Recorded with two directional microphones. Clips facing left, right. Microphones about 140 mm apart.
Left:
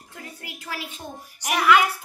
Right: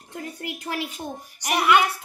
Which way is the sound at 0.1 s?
25° right (ahead or behind).